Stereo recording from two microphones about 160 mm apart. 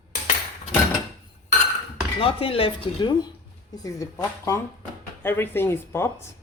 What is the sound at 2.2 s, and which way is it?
Speech, 35° left (ahead or behind).